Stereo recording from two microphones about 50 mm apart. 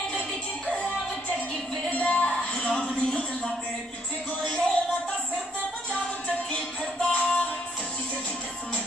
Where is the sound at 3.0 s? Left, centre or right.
Centre.